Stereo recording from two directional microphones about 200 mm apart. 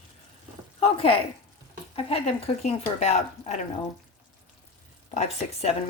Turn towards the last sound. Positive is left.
turn(degrees=35)  # may be behind; listen again after turning